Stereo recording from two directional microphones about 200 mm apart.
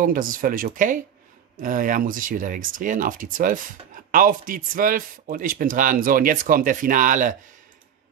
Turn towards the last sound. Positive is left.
turn(degrees=-40)  # may be behind; listen again after turning